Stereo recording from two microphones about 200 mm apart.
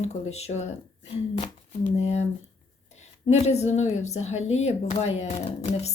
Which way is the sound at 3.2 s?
35° left (ahead or behind).